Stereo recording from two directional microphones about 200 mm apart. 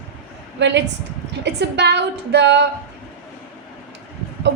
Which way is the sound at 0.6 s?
60° right (ahead or behind).